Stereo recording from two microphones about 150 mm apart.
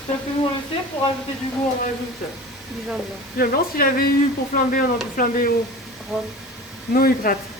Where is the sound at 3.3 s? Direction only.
75° left (ahead or behind).